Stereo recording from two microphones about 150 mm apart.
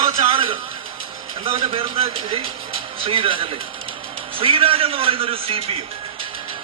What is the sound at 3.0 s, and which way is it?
A man's voice, 35° right (ahead or behind).